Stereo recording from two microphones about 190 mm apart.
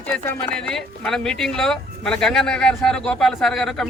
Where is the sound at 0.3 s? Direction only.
10° left (ahead or behind).